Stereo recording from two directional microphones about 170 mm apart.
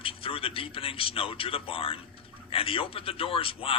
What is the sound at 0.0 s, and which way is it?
A man's voice, 30° left (ahead or behind).